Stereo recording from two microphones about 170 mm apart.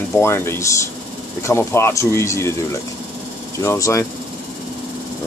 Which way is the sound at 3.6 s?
15° left (ahead or behind).